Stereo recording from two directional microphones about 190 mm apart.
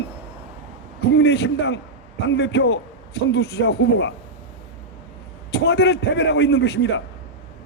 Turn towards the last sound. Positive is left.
turn(degrees=65)  # may be behind; listen again after turning